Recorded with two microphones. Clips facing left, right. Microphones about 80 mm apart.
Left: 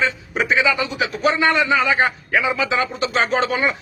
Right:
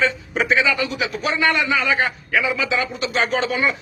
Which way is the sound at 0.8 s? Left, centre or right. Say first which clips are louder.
Left 1 dB; left.